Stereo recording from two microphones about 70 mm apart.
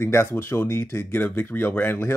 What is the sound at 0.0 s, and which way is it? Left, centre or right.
Speech, left.